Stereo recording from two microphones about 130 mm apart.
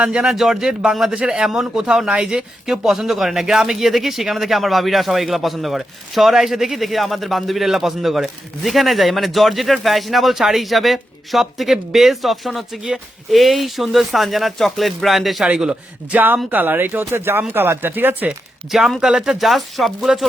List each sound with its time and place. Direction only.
0.0 s a man's voice: 10° right (ahead or behind)
18.7 s a man's voice: 5° right (ahead or behind)